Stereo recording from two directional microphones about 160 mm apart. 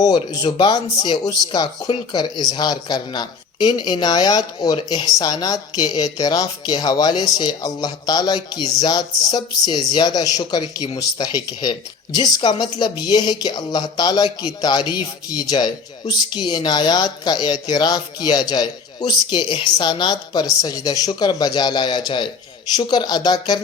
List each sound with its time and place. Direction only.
0.0 s speech: 25° left (ahead or behind)